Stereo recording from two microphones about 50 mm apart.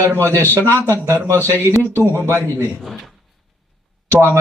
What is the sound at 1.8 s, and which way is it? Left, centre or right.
Speech, left.